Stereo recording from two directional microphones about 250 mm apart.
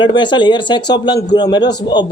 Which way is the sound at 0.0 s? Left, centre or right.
Centre.